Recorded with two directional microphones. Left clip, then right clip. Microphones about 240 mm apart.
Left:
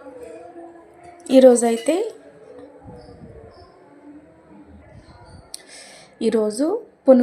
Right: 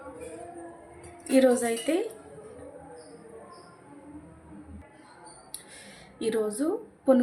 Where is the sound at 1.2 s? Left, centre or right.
Left.